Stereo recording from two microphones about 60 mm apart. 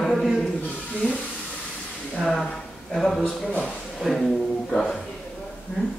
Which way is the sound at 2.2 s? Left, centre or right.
Centre.